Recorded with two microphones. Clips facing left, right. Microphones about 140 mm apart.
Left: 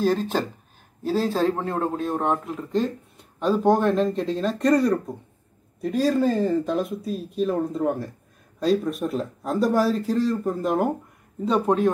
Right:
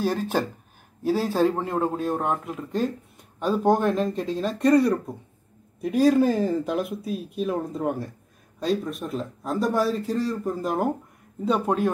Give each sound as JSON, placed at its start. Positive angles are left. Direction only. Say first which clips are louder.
{"t": 0.0, "sound": "a man's voice", "louder": "left 2 dB", "side_deg": -10}